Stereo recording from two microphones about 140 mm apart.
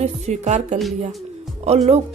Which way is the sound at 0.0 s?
55° right (ahead or behind).